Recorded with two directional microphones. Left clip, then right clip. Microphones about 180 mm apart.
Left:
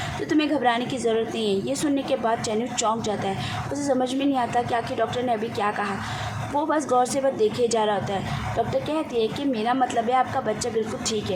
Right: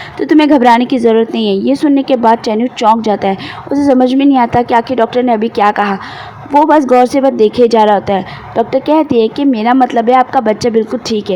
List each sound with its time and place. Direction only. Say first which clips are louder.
0.2 s a woman's voice: right 15 dB; 45° right (ahead or behind)